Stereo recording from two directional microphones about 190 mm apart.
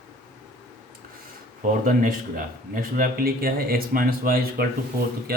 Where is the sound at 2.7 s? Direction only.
50° right (ahead or behind).